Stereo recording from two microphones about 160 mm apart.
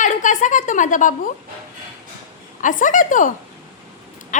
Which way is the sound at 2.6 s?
55° left (ahead or behind).